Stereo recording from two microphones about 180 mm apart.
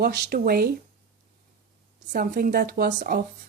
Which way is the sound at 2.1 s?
55° right (ahead or behind).